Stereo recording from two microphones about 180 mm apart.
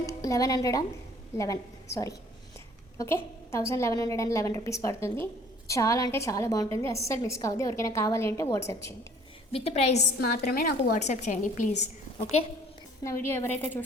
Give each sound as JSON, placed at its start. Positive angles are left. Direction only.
{"t": 0.0, "sound": "a woman's voice", "side_deg": 20}
{"t": 9.5, "sound": "a woman's voice", "side_deg": 35}
{"t": 10.2, "sound": "a woman's voice", "side_deg": 60}
{"t": 11.0, "sound": "a woman's voice", "side_deg": 40}
{"t": 13.2, "sound": "a woman's voice", "side_deg": 15}